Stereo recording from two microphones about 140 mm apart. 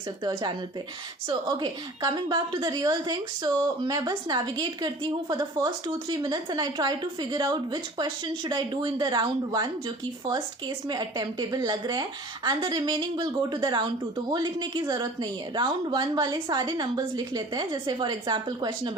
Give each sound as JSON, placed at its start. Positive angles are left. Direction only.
{"t": 1.3, "sound": "a woman's voice", "side_deg": -35}